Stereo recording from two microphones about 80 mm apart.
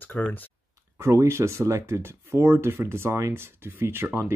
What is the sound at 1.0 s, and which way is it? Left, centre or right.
Speech, right.